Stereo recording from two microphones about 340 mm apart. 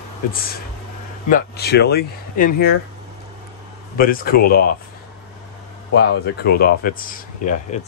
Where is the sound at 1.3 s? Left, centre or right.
Left.